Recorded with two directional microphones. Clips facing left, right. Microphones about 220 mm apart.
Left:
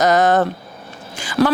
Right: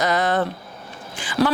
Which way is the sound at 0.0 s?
45° left (ahead or behind).